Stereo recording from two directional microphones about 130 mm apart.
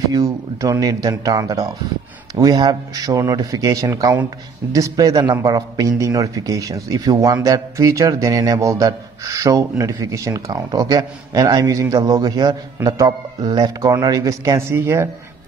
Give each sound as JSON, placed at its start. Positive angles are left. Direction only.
{"t": 0.1, "sound": "speech", "side_deg": -25}